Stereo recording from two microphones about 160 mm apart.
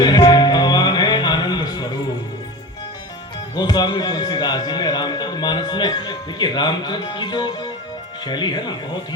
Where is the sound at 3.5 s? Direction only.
25° left (ahead or behind).